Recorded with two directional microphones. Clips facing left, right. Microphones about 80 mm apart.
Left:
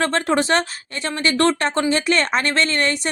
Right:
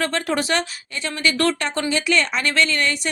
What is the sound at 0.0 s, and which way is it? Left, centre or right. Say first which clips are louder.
Speech: left 3 dB; left.